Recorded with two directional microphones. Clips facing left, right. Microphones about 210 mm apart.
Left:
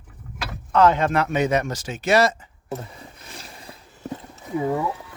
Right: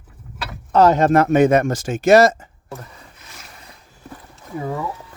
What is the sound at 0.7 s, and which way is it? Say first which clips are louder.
Speech: right 4 dB; 40° right (ahead or behind).